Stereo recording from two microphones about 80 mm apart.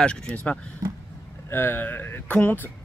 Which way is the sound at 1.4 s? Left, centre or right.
Left.